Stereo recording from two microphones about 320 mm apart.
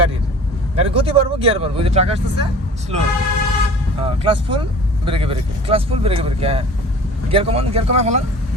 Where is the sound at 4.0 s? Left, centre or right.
Centre.